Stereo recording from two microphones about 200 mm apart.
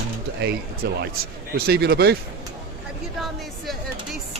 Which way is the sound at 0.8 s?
55° right (ahead or behind).